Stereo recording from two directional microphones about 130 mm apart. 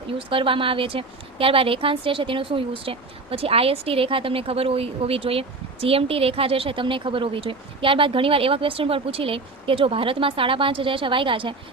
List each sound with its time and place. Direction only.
0.1 s speech: 45° right (ahead or behind)